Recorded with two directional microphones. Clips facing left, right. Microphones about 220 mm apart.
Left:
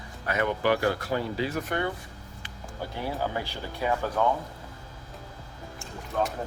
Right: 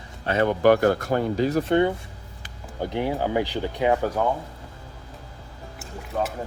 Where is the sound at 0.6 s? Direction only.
45° right (ahead or behind).